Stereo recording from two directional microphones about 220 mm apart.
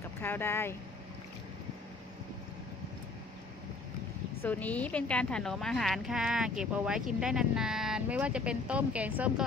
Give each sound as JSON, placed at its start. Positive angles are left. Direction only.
{"t": 0.2, "sound": "speech", "side_deg": 10}
{"t": 4.4, "sound": "a woman's voice", "side_deg": 5}